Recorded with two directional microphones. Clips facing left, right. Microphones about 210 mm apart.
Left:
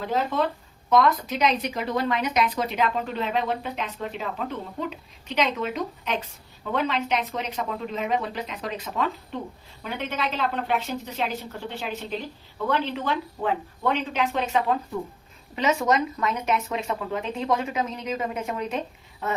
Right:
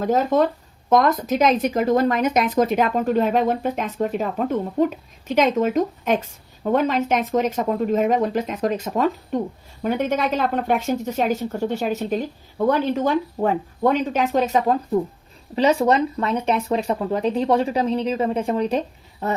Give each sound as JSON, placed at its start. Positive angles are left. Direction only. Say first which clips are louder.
{"t": 0.0, "sound": "speech", "louder": "right 7 dB", "side_deg": -45}